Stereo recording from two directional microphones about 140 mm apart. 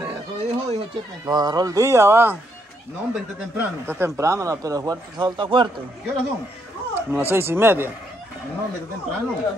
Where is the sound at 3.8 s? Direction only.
20° right (ahead or behind); by 5.8 s 35° right (ahead or behind).